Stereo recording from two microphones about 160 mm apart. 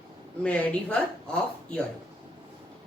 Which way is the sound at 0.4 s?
10° left (ahead or behind).